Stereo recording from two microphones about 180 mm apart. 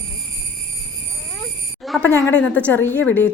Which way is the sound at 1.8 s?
Centre (ahead or behind).